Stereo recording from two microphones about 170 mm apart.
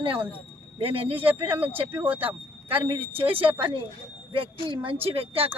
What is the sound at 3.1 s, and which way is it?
Speech, 35° right (ahead or behind).